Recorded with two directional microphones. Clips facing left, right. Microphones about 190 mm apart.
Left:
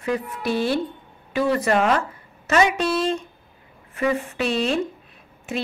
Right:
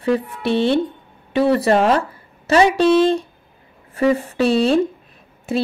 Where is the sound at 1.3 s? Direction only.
30° right (ahead or behind).